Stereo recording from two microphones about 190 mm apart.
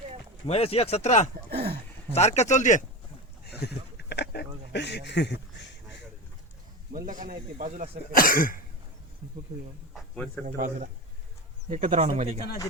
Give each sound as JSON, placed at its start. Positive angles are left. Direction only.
{"t": 0.4, "sound": "speech", "side_deg": 30}
{"t": 1.5, "sound": "speech", "side_deg": -55}
{"t": 2.1, "sound": "speech", "side_deg": 35}
{"t": 3.4, "sound": "a sound", "side_deg": 60}
{"t": 6.9, "sound": "speech", "side_deg": -45}
{"t": 8.1, "sound": "speech", "side_deg": 50}
{"t": 9.9, "sound": "snake", "side_deg": 5}
{"t": 10.4, "sound": "speech", "side_deg": -40}